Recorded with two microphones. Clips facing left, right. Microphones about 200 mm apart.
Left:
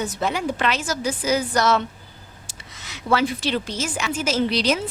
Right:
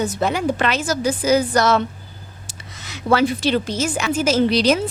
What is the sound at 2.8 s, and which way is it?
A woman's voice, 45° right (ahead or behind).